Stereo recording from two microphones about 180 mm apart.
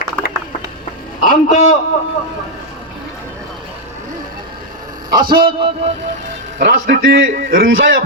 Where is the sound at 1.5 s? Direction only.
40° left (ahead or behind).